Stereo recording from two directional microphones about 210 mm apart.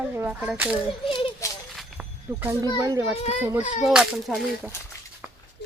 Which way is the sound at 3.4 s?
10° right (ahead or behind).